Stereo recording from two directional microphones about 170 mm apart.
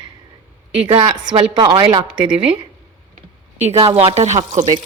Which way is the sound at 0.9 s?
25° right (ahead or behind).